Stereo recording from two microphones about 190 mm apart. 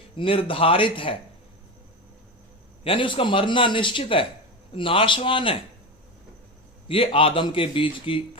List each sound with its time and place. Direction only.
0.2 s a man's voice: 30° left (ahead or behind)
2.8 s a man's voice: 25° left (ahead or behind)
6.8 s a man's voice: 30° left (ahead or behind)